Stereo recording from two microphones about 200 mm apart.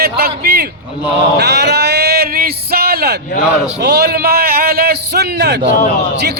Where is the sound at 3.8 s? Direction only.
55° right (ahead or behind).